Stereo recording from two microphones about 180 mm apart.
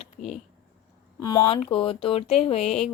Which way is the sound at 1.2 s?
20° left (ahead or behind).